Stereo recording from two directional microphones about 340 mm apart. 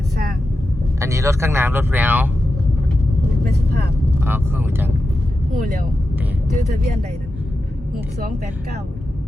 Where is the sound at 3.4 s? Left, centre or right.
Right.